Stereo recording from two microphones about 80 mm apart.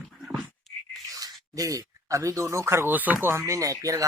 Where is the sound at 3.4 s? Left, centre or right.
Right.